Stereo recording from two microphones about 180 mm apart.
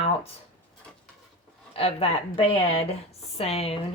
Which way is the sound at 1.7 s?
35° left (ahead or behind).